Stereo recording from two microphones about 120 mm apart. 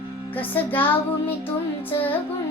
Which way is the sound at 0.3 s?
15° left (ahead or behind).